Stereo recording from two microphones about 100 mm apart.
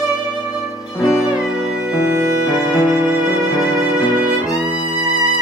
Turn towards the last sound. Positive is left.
turn(degrees=-5)  # may be behind; listen again after turning